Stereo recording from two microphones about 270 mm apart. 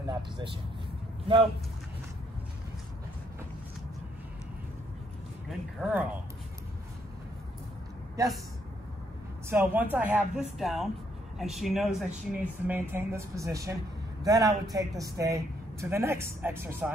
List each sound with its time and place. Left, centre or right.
0.0 s speech: centre
5.8 s speech: centre
8.2 s speech: centre
9.5 s speech: centre